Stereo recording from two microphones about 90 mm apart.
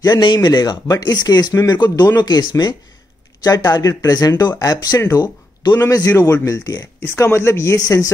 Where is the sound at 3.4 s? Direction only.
45° left (ahead or behind).